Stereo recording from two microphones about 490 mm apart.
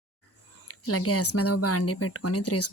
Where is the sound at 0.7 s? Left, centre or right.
Left.